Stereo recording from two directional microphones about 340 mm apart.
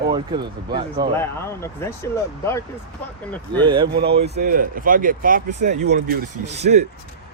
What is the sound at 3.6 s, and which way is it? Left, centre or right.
Speech, centre.